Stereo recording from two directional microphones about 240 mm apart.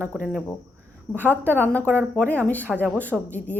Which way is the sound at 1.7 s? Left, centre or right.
Centre.